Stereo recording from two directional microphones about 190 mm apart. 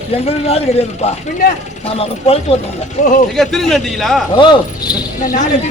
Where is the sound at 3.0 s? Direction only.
40° left (ahead or behind).